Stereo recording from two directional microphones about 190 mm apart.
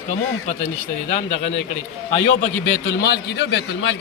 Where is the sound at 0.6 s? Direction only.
35° left (ahead or behind).